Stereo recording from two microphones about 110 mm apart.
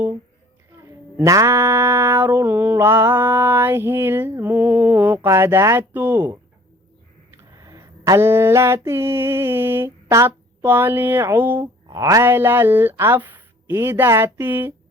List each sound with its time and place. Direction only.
1.1 s mantra: 30° right (ahead or behind)
7.3 s a sound: 30° right (ahead or behind)
8.2 s mantra: 20° right (ahead or behind)
11.9 s speech: 30° right (ahead or behind)
12.2 s mantra: 20° right (ahead or behind)